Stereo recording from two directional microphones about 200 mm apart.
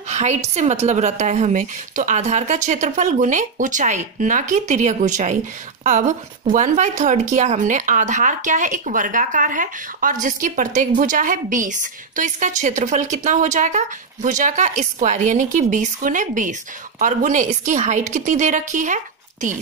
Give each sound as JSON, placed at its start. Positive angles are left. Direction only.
{"t": 0.1, "sound": "a woman's voice", "side_deg": -35}